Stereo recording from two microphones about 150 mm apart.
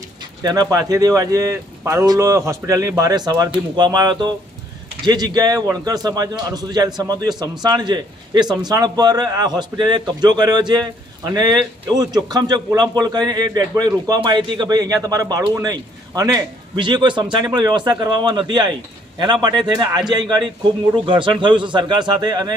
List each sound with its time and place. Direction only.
0.4 s a man's voice: 25° right (ahead or behind)